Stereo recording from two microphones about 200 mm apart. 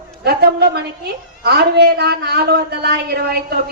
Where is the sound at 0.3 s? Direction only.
55° right (ahead or behind).